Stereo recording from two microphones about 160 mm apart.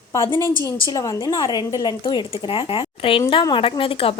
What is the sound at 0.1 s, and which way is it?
A woman's voice, 15° left (ahead or behind).